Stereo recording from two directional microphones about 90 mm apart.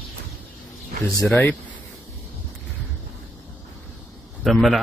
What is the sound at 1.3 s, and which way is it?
Speech, 25° left (ahead or behind).